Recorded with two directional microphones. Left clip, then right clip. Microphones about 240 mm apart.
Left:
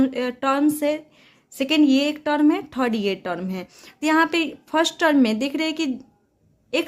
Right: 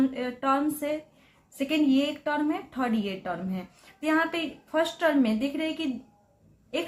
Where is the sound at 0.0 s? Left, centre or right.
Left.